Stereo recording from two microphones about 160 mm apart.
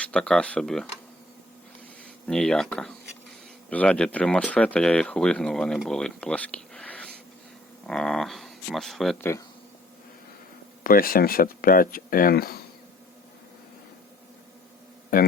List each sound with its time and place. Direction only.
0.0 s speech: 5° left (ahead or behind)
2.2 s speech: 5° left (ahead or behind)
10.8 s speech: 65° left (ahead or behind)